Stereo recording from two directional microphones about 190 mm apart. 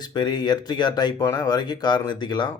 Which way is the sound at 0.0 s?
20° left (ahead or behind).